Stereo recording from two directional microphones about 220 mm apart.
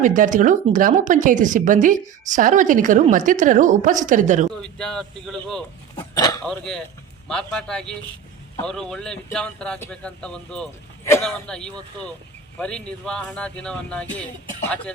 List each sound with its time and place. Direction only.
0.0 s a woman's voice: 35° right (ahead or behind)
4.5 s a man's voice: 5° left (ahead or behind)
6.1 s speech: 15° left (ahead or behind)
6.4 s a man's voice: 5° left (ahead or behind)